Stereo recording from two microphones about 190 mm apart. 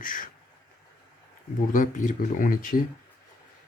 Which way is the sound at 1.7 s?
45° left (ahead or behind).